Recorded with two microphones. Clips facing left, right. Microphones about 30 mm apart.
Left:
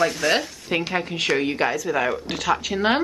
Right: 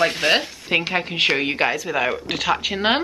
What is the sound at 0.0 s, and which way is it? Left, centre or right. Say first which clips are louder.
Speech: right 2 dB; right.